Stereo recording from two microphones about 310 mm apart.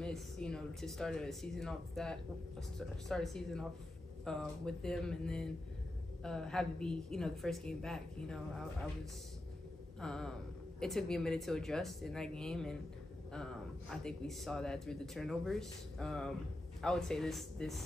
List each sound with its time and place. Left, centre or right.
0.0 s a man's voice: centre
9.9 s a man's voice: centre